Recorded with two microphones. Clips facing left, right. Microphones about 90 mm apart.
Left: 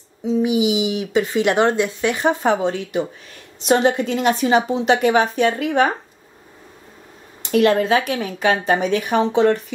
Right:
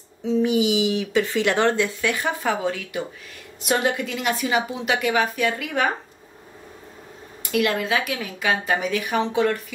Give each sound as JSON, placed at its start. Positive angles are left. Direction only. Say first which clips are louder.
{"t": 0.2, "sound": "a woman's voice", "louder": "left 2 dB", "side_deg": 15}
{"t": 7.5, "sound": "a woman's voice", "louder": "left 7 dB", "side_deg": 35}